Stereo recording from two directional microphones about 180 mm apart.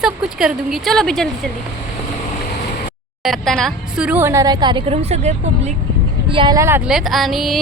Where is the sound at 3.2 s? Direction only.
Centre (ahead or behind); by 5.7 s 40° right (ahead or behind).